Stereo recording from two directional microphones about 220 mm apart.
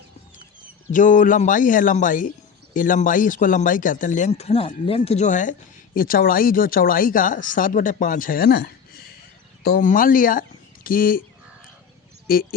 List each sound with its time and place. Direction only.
0.9 s a man's voice: 35° left (ahead or behind)
12.3 s a man's voice: 40° left (ahead or behind)